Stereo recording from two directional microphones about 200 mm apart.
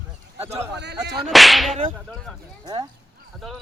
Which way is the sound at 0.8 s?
55° right (ahead or behind).